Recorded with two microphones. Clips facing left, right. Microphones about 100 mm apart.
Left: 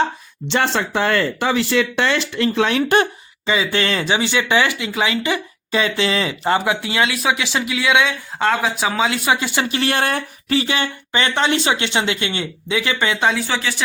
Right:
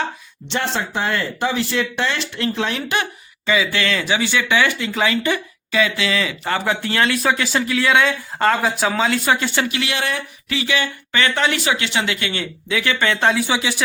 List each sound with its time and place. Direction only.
0.4 s speech: 85° left
3.4 s speech: 25° left (ahead or behind)
5.7 s speech: 30° left (ahead or behind)
6.7 s speech: 10° left (ahead or behind)
9.6 s speech: 40° left (ahead or behind); by 13.1 s 20° left (ahead or behind)
13.1 s speech: centre (ahead or behind)
13.5 s speech: 15° right (ahead or behind)